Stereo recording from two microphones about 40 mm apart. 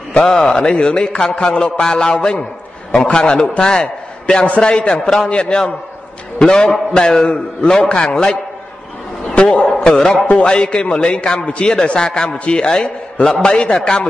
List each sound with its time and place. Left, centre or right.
0.2 s a man's voice: centre